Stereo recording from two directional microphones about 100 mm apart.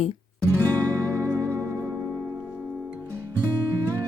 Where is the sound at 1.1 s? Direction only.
30° right (ahead or behind).